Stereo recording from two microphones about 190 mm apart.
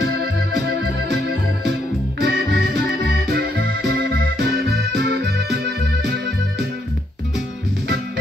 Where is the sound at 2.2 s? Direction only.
55° right (ahead or behind).